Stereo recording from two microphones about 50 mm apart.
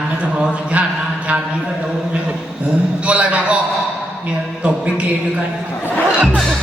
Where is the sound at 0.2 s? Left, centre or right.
Right.